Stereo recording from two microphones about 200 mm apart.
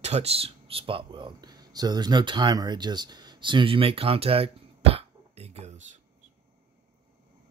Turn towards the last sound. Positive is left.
turn(degrees=-30)  # may be behind; listen again after turning